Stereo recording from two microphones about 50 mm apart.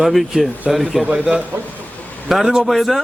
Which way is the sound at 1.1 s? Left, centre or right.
Right.